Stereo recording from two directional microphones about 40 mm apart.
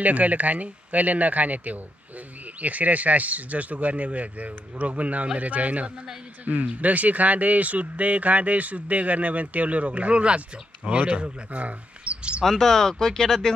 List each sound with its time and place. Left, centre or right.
0.0 s speech: right
12.4 s speech: centre